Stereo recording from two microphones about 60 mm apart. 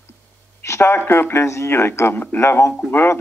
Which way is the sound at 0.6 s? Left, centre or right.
Left.